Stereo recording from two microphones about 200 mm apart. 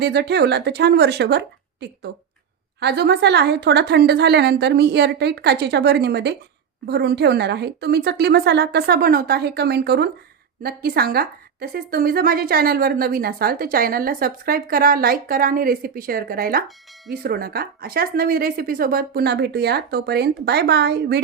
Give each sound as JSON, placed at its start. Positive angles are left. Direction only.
{"t": 0.0, "sound": "a woman's voice", "side_deg": -55}